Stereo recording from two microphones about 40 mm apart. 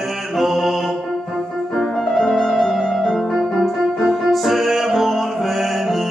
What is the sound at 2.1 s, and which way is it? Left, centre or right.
Music, centre.